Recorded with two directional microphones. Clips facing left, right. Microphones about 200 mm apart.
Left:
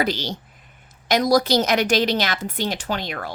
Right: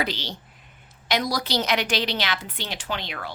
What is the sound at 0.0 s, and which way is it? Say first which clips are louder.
A woman's voice: left 5 dB; 45° left (ahead or behind).